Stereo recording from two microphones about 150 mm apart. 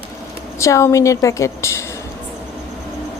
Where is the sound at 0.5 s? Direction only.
20° left (ahead or behind).